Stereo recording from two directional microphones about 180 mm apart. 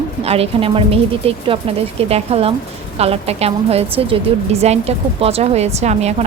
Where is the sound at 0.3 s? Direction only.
30° right (ahead or behind).